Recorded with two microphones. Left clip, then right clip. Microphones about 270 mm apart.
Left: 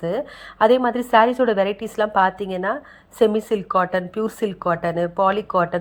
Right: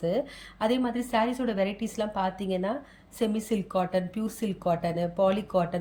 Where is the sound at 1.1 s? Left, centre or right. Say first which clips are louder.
Left 13 dB; left.